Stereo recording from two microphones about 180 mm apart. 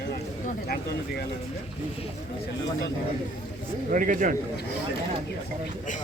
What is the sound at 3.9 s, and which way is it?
Speech, 45° right (ahead or behind).